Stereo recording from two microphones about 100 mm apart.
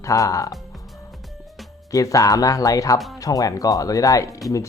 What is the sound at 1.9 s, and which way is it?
Speech, 35° left (ahead or behind).